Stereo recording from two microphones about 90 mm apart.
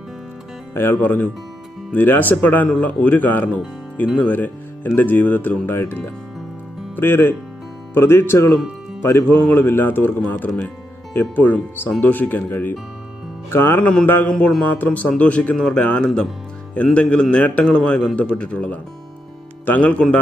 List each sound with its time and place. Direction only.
0.7 s speech: 25° left (ahead or behind)
14.3 s a man's voice: 5° left (ahead or behind)
14.7 s a man's voice: 15° left (ahead or behind)